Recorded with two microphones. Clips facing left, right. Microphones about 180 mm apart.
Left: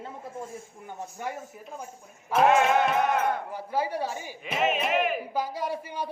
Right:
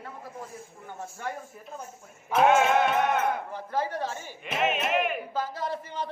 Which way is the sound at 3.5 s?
10° left (ahead or behind).